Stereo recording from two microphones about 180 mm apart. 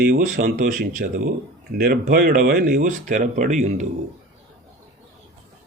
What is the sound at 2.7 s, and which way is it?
Speech, 45° right (ahead or behind).